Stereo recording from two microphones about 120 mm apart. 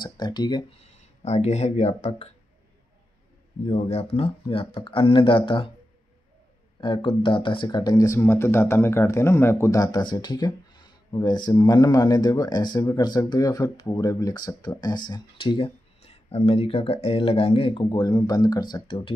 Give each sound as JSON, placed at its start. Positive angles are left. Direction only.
{"t": 0.0, "sound": "speech", "side_deg": 35}
{"t": 0.7, "sound": "speech", "side_deg": 65}
{"t": 3.7, "sound": "speech", "side_deg": 55}
{"t": 6.8, "sound": "speech", "side_deg": 45}